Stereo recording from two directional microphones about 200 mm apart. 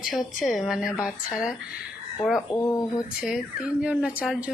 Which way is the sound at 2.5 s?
15° left (ahead or behind).